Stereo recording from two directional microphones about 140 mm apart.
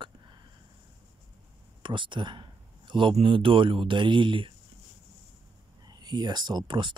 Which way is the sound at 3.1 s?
35° right (ahead or behind).